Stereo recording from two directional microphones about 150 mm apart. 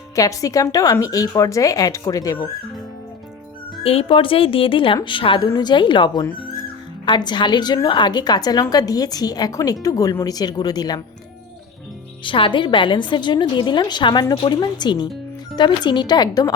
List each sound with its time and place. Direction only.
0.2 s a woman's voice: 25° left (ahead or behind)
3.8 s a woman's voice: 35° left (ahead or behind)
12.2 s a woman's voice: 35° left (ahead or behind)